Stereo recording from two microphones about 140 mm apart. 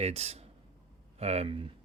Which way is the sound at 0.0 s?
45° right (ahead or behind).